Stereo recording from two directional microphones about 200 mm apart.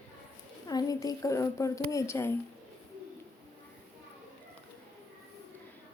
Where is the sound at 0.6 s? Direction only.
20° left (ahead or behind).